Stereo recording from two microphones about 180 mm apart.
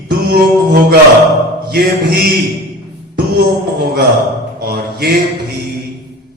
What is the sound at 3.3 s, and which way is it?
Music, 65° right (ahead or behind).